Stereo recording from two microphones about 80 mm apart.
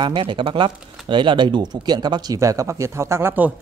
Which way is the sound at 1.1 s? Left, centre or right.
Right.